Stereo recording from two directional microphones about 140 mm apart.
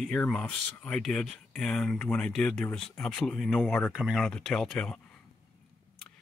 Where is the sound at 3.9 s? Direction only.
Centre (ahead or behind).